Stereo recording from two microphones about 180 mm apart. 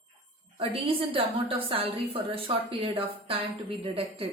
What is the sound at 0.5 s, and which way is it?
A woman's voice, 30° right (ahead or behind).